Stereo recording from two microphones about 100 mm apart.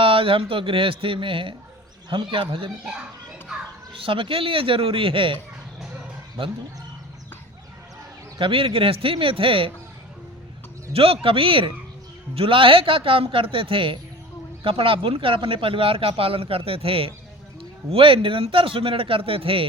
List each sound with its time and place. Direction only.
0.0 s speech: 65° right (ahead or behind)
3.9 s speech: 60° right (ahead or behind)
8.4 s speech: 65° right (ahead or behind)
10.9 s speech: 70° right (ahead or behind)